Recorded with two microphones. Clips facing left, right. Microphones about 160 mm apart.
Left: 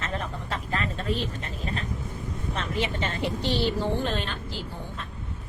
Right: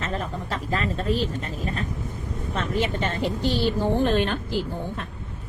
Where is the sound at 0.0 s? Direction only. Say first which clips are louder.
Right 3 dB; 40° right (ahead or behind).